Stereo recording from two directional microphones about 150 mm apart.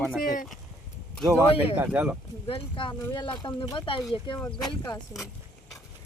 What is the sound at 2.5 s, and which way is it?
Speech, 35° left (ahead or behind).